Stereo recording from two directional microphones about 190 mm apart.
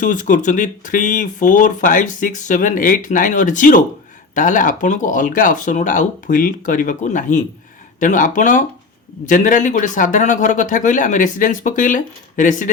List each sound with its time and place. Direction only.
0.0 s speech: 40° left (ahead or behind)